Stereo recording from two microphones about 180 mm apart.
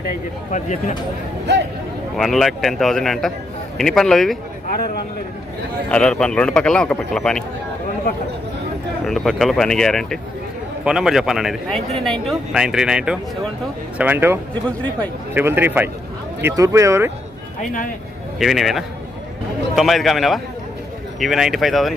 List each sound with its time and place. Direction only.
0.5 s speech: 40° left (ahead or behind)
2.1 s speech: centre (ahead or behind)
4.7 s speech: 60° left (ahead or behind)
5.9 s speech: 5° left (ahead or behind)
9.0 s speech: centre (ahead or behind)
15.4 s speech: 10° right (ahead or behind)
17.6 s speech: 50° left (ahead or behind)
18.3 s speech: centre (ahead or behind)